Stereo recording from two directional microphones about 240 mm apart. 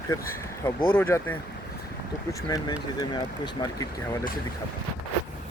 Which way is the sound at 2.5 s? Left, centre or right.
Centre.